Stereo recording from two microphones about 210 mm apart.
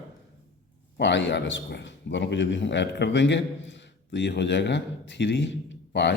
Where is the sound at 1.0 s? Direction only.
55° left (ahead or behind).